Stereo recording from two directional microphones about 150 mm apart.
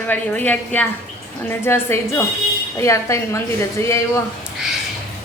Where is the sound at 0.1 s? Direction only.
10° left (ahead or behind).